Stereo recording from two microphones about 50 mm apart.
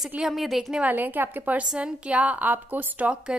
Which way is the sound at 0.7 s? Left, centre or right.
Right.